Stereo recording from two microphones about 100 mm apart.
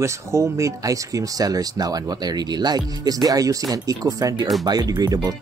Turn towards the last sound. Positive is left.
turn(degrees=-40)  # may be behind; listen again after turning